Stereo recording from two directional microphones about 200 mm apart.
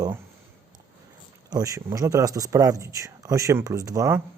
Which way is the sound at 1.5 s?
15° right (ahead or behind).